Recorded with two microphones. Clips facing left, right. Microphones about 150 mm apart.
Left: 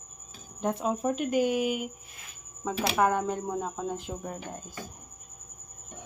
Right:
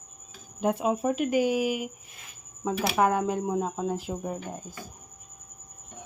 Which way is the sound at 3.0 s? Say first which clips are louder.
Right 2 dB; 5° right (ahead or behind).